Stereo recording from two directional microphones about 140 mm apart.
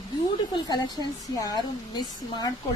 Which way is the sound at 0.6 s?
30° left (ahead or behind).